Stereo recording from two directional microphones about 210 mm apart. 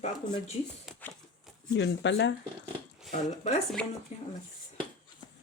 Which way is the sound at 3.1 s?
35° left (ahead or behind).